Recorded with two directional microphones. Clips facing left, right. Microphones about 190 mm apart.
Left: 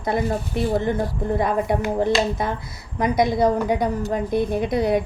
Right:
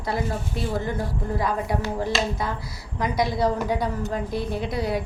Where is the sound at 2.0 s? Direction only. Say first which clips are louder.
Left 5 dB; 25° left (ahead or behind).